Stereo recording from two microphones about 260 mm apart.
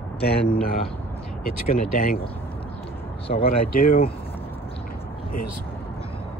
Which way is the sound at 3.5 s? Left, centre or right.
Left.